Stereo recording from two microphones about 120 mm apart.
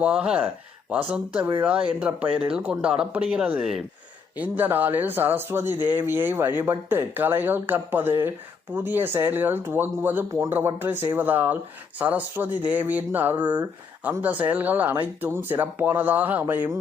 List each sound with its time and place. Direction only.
0.0 s speech: 10° right (ahead or behind)